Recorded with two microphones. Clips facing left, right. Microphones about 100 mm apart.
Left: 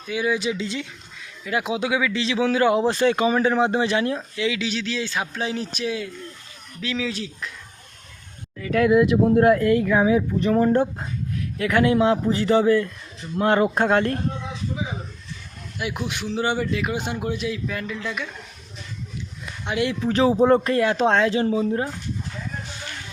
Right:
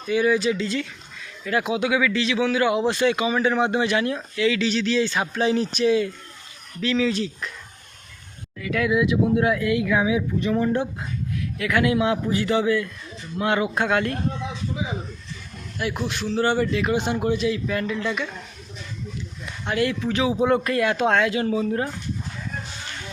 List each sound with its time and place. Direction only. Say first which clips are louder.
0.0 s speech: right 5 dB; 5° left (ahead or behind)
0.3 s speech: right 3 dB; 15° left (ahead or behind)
2.4 s speech: left 3 dB; 35° left (ahead or behind)
4.4 s speech: right 4 dB; 10° left (ahead or behind)
8.5 s speech: left 4 dB; 40° left (ahead or behind)
15.8 s speech: right 2 dB; 10° left (ahead or behind)
16.6 s speech: right 3 dB; 5° left (ahead or behind)
19.6 s speech: right 1 dB; 15° left (ahead or behind)
19.9 s speech: left 3 dB; 35° left (ahead or behind)